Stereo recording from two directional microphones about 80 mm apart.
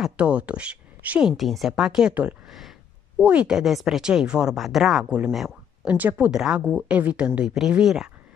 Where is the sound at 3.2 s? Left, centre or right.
Centre.